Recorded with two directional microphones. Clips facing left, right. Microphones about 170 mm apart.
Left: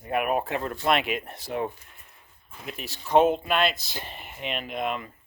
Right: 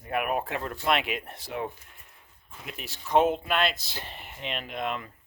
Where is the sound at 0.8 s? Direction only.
45° left (ahead or behind).